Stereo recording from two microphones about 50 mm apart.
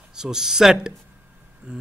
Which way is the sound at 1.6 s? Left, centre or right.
Right.